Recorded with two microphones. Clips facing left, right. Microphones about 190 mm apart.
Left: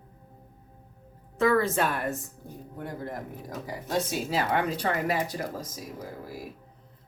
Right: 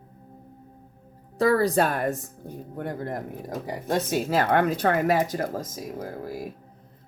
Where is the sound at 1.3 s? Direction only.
35° right (ahead or behind).